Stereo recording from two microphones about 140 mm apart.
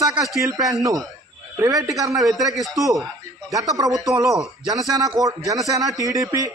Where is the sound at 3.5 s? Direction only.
25° right (ahead or behind).